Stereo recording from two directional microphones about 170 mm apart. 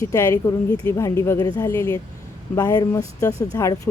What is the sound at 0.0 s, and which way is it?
Speech, 15° left (ahead or behind).